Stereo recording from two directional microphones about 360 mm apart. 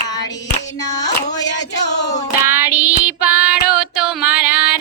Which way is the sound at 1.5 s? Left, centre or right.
Left.